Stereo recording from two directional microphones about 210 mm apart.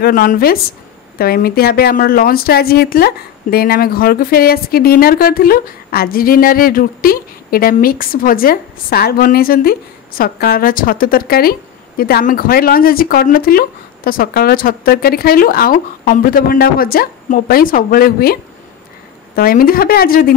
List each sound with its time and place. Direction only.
0.0 s speech: 40° left (ahead or behind)